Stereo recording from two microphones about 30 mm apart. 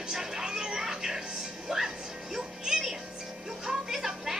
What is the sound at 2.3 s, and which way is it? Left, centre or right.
Music, centre.